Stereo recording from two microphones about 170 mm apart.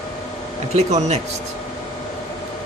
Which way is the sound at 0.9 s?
40° right (ahead or behind).